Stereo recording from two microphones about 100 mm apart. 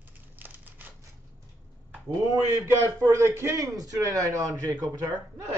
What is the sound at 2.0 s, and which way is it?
A man's voice, 30° right (ahead or behind).